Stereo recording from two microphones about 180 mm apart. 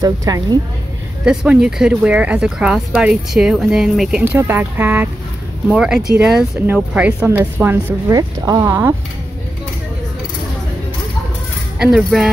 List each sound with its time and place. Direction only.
0.0 s a woman's voice: 20° right (ahead or behind)
1.2 s a woman's voice: 5° right (ahead or behind)
11.8 s speech: centre (ahead or behind)